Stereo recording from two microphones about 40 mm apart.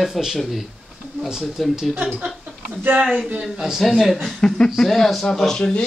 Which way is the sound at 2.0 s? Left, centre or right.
Right.